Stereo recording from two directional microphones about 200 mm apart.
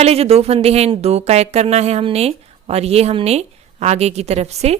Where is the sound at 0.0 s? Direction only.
30° right (ahead or behind).